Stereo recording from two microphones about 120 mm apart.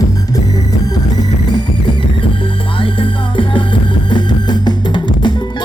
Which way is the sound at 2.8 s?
45° left (ahead or behind).